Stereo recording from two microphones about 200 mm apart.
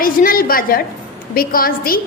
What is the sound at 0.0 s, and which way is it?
A woman's voice, 45° left (ahead or behind).